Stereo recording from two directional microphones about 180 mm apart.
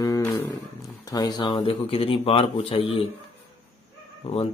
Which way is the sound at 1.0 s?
20° left (ahead or behind).